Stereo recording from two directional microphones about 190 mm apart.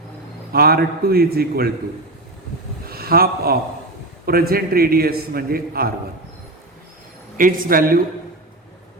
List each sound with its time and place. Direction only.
0.5 s a man's voice: 55° right (ahead or behind)
2.8 s a man's voice: 55° right (ahead or behind)
7.3 s a man's voice: 45° right (ahead or behind)